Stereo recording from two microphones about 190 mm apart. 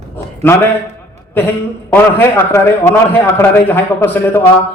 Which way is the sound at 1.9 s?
10° left (ahead or behind).